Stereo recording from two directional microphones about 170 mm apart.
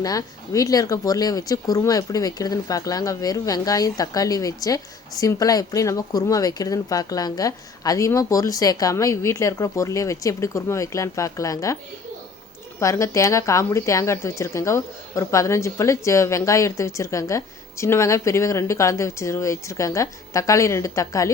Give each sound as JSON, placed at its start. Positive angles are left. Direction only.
{"t": 0.0, "sound": "speech", "side_deg": 20}
{"t": 12.8, "sound": "speech", "side_deg": 20}